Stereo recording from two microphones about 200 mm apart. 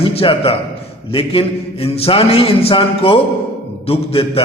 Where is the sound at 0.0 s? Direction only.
30° left (ahead or behind).